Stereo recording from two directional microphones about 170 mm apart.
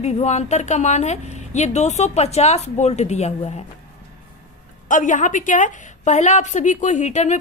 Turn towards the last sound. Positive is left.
turn(degrees=40)  # may be behind; listen again after turning